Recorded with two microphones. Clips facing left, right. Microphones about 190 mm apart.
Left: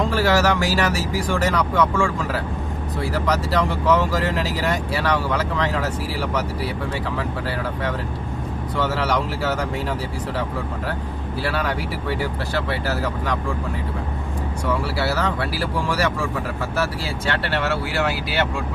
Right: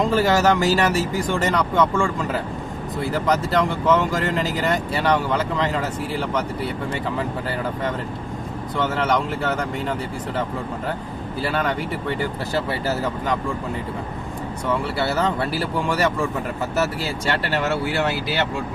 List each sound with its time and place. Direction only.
0.1 s speech: centre (ahead or behind)
8.8 s speech: centre (ahead or behind)
11.4 s speech: centre (ahead or behind)
14.9 s speech: centre (ahead or behind)